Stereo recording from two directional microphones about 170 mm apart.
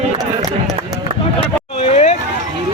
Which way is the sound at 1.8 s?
40° left (ahead or behind).